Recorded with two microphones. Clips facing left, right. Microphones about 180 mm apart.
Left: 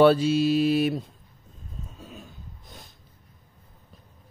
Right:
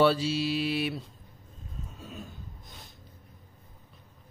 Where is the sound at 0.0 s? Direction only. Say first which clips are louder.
Left 6 dB; 50° left (ahead or behind).